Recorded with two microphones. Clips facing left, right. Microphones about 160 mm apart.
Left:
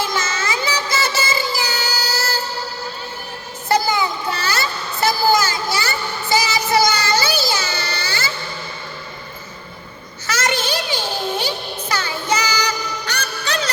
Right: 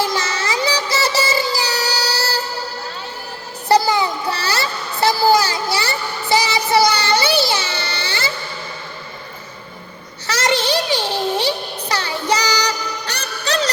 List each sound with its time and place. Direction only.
0.0 s music: 35° right (ahead or behind)
3.7 s a sound: 30° right (ahead or behind)
10.2 s music: 30° right (ahead or behind)